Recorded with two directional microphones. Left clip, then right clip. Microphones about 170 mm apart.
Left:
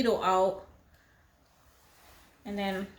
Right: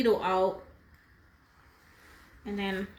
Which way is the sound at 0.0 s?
50° left (ahead or behind).